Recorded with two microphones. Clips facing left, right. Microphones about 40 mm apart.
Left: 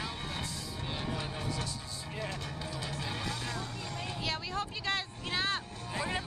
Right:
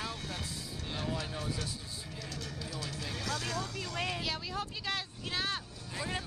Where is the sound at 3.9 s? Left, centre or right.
Right.